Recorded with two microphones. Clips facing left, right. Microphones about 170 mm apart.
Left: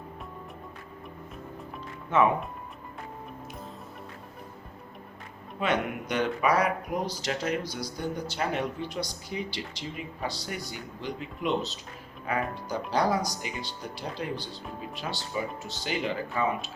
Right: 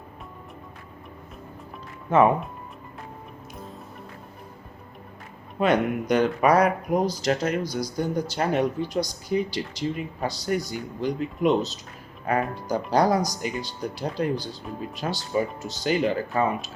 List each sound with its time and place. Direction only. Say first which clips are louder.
2.0 s speech: right 5 dB; 40° right (ahead or behind)
5.5 s speech: right 7 dB; 40° right (ahead or behind)